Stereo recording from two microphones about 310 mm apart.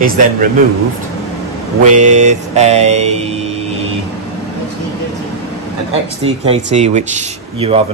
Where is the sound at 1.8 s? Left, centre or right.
Right.